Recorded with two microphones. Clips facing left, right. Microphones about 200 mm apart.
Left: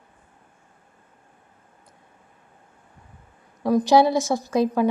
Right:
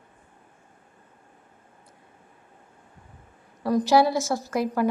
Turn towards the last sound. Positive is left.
turn(degrees=20)  # may be behind; listen again after turning